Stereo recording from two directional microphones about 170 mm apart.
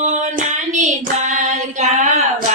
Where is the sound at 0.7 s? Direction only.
45° right (ahead or behind).